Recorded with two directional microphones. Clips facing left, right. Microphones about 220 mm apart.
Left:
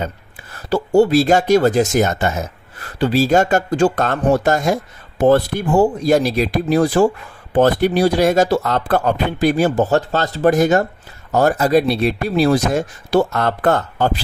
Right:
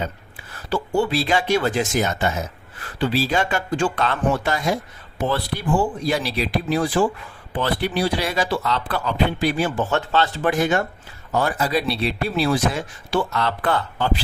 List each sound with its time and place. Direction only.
0.5 s speech: 40° left (ahead or behind)